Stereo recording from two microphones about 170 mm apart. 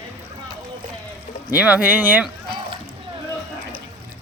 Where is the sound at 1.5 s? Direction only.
5° right (ahead or behind).